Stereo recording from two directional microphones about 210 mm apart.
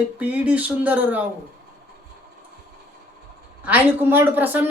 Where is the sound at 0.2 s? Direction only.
5° right (ahead or behind).